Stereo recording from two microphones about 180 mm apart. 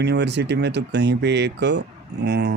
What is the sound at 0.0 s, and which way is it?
Speech, 70° right (ahead or behind).